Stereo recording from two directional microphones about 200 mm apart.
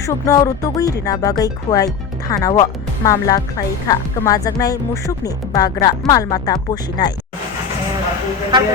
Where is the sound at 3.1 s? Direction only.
20° left (ahead or behind).